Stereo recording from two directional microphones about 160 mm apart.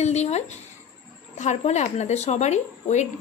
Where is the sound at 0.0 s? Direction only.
45° left (ahead or behind).